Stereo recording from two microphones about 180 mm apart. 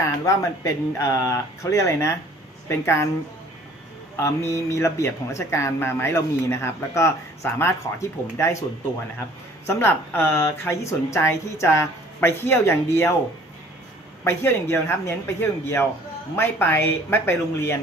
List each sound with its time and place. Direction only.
0.0 s speech: 15° left (ahead or behind)
4.2 s speech: 15° left (ahead or behind)
9.6 s speech: 15° left (ahead or behind)
14.3 s speech: 15° left (ahead or behind)